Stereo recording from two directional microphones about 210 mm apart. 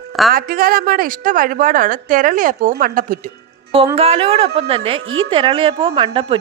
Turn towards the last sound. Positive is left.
turn(degrees=-25)  # may be behind; listen again after turning